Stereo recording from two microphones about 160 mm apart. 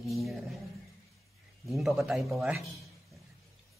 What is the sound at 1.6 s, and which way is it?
A man's voice, centre (ahead or behind).